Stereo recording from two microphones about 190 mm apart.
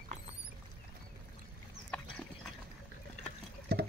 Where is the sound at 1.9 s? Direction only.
5° left (ahead or behind).